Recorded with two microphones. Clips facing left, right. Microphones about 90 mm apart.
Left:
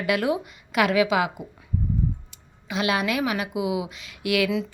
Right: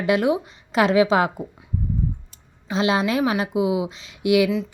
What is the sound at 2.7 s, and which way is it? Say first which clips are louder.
A woman's voice: right 4 dB; 25° right (ahead or behind).